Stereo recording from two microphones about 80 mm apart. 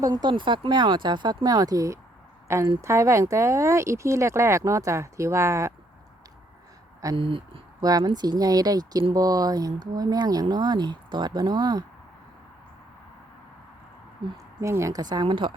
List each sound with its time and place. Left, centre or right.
0.0 s speech: right
7.2 s speech: right
7.8 s speech: right
14.6 s speech: right
15.0 s speech: right